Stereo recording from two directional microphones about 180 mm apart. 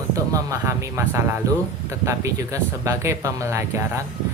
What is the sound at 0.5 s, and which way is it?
Speech, 15° right (ahead or behind).